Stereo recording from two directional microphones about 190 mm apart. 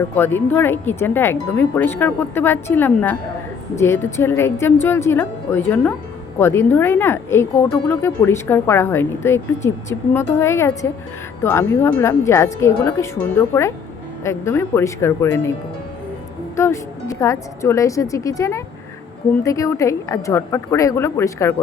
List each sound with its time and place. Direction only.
0.2 s speech: 10° left (ahead or behind)
16.6 s speech: 15° left (ahead or behind)